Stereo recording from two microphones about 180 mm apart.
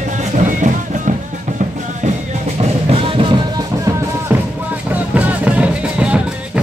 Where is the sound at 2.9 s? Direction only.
30° right (ahead or behind).